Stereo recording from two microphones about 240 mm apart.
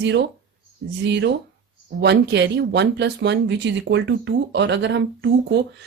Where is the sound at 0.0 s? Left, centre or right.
Right.